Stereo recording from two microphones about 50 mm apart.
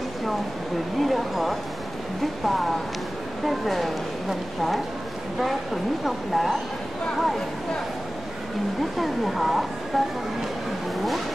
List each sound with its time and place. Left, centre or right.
0.9 s a woman's voice: centre
6.0 s a woman's voice: centre
8.9 s a woman's voice: centre